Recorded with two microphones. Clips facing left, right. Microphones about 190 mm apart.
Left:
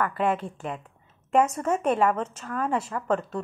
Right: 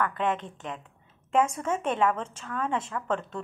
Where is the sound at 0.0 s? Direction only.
5° left (ahead or behind).